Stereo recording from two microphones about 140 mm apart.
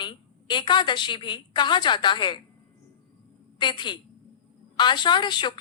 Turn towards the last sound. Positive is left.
turn(degrees=35)  # may be behind; listen again after turning